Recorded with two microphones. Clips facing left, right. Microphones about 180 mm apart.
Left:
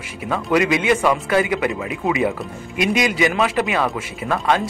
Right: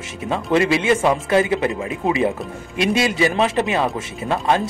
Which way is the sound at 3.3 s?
25° right (ahead or behind).